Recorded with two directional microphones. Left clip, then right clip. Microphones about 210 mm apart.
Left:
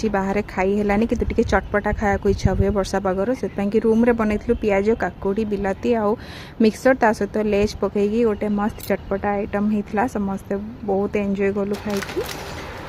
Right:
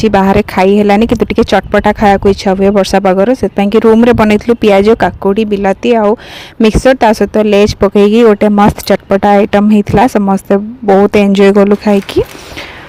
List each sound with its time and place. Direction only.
0.0 s speech: 40° right (ahead or behind)